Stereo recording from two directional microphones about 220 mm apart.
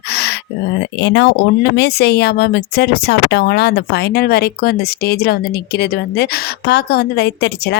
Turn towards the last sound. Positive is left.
turn(degrees=50)  # may be behind; listen again after turning